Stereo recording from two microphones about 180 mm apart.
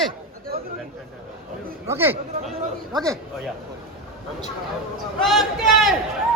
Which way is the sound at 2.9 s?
20° right (ahead or behind).